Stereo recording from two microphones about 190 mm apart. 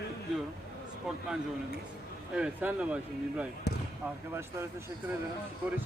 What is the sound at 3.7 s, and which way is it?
Basketball bounce, 60° left (ahead or behind).